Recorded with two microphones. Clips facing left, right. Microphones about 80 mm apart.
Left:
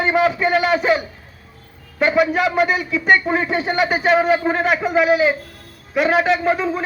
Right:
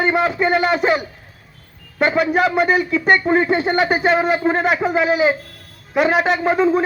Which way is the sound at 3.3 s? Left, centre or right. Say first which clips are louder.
Right 4 dB; centre.